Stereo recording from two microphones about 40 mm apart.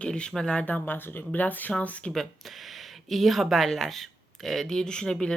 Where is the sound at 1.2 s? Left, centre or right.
Left.